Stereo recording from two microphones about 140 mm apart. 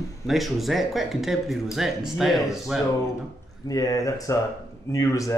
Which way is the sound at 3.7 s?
25° left (ahead or behind).